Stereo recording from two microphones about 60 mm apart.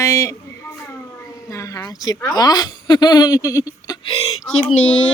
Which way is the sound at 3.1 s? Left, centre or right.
Left.